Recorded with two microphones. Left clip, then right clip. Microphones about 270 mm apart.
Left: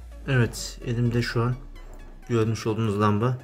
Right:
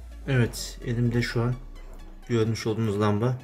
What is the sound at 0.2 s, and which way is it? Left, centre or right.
Speech, centre.